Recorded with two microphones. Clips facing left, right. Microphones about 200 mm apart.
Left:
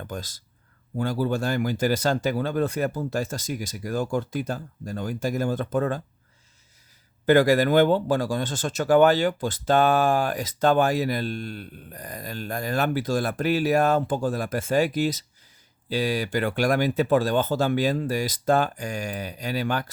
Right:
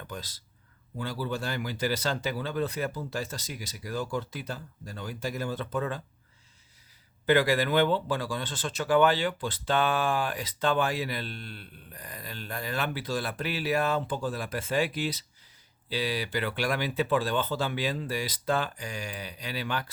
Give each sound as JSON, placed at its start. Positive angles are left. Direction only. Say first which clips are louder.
{"t": 0.0, "sound": "speech", "louder": "left 6 dB", "side_deg": 45}
{"t": 7.3, "sound": "speech", "louder": "left 6 dB", "side_deg": 45}